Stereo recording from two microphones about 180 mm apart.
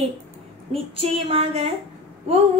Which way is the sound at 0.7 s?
35° right (ahead or behind).